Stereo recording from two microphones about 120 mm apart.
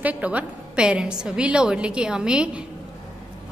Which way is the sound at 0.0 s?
10° right (ahead or behind).